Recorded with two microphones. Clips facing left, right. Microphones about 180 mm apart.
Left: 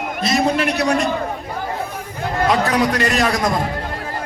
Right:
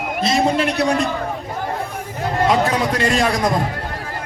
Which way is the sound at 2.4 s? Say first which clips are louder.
Left 1 dB; 25° right (ahead or behind).